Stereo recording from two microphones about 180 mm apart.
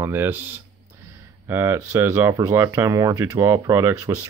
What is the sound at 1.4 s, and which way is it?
Speech, 15° right (ahead or behind).